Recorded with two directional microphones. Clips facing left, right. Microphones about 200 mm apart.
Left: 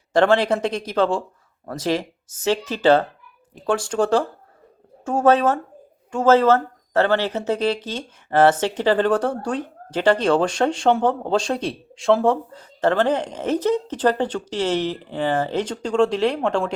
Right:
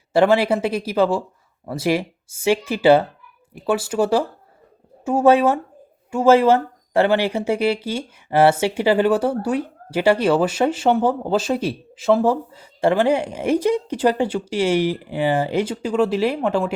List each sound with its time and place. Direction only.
0.1 s speech: 10° right (ahead or behind)